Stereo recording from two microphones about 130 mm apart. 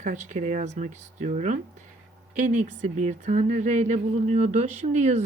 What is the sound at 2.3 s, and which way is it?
Speech, 75° right (ahead or behind).